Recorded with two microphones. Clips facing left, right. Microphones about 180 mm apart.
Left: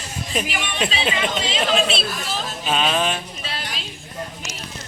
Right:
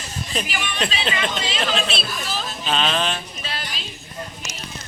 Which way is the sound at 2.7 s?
10° left (ahead or behind).